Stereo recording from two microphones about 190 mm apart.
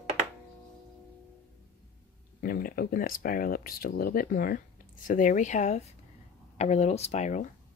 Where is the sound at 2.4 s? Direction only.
50° left (ahead or behind).